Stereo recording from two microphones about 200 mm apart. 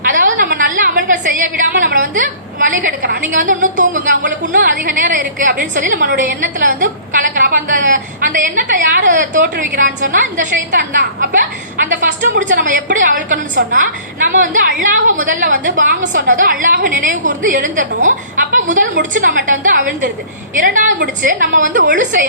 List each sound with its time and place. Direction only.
0.0 s a woman's voice: 40° right (ahead or behind)